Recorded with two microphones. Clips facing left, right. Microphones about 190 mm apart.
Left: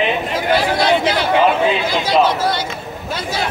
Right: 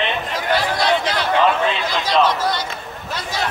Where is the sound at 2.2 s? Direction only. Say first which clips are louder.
Left 1 dB; 25° left (ahead or behind).